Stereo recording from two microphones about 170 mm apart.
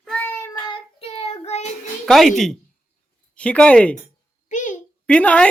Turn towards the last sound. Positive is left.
turn(degrees=5)  # may be behind; listen again after turning